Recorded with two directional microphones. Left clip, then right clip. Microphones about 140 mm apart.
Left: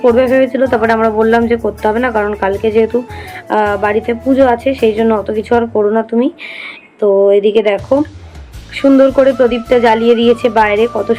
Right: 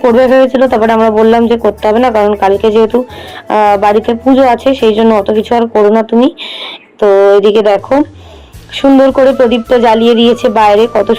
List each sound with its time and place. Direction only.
0.2 s speech: 45° right (ahead or behind)
0.9 s speech: 25° right (ahead or behind)
7.1 s speech: 60° right (ahead or behind)
8.7 s speech: 35° right (ahead or behind)